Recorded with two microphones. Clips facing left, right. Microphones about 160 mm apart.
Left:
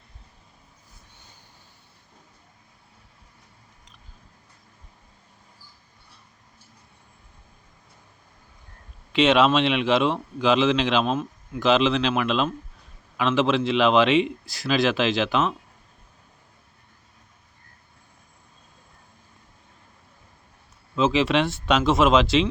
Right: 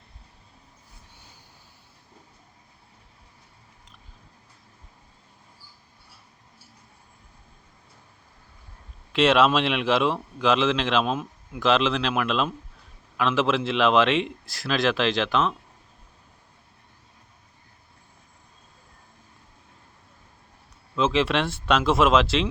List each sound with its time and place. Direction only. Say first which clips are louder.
9.1 s speech: left 1 dB; centre (ahead or behind)
20.9 s speech: left 2 dB; centre (ahead or behind)